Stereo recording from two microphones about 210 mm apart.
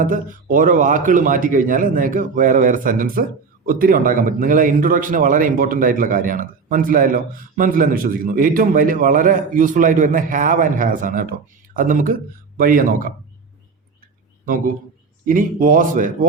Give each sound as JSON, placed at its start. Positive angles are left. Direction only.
{"t": 0.0, "sound": "speech", "side_deg": -40}
{"t": 15.2, "sound": "speech", "side_deg": -40}